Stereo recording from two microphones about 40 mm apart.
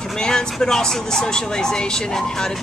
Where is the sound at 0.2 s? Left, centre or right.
Centre.